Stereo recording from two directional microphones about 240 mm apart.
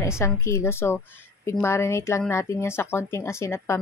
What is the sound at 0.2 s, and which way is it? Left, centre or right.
A woman's voice, centre.